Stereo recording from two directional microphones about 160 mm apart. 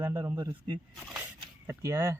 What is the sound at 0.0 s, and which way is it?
Speech, 20° right (ahead or behind).